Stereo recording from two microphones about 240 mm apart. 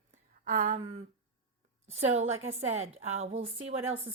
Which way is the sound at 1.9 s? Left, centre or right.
Right.